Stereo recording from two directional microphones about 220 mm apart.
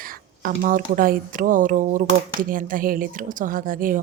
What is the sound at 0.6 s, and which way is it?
Speech, 40° right (ahead or behind).